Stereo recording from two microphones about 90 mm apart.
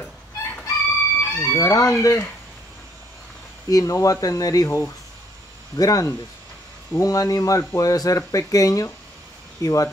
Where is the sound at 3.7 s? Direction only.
40° left (ahead or behind).